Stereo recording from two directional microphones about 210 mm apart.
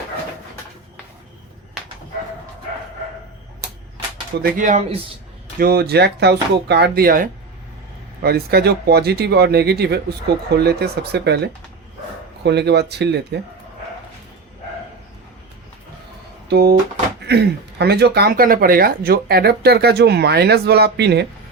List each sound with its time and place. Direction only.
4.4 s speech: 40° right (ahead or behind)
5.5 s speech: 45° right (ahead or behind)
12.5 s speech: 55° right (ahead or behind)
16.5 s speech: 50° right (ahead or behind)